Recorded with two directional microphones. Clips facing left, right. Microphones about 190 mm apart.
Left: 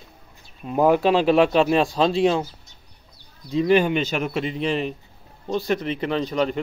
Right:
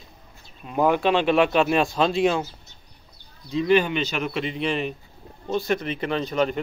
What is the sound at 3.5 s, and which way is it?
Speech, 45° left (ahead or behind).